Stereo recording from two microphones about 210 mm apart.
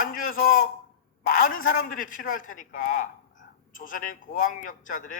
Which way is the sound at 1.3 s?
40° left (ahead or behind).